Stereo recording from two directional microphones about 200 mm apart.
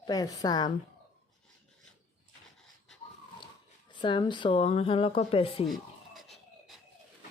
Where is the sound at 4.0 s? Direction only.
25° left (ahead or behind).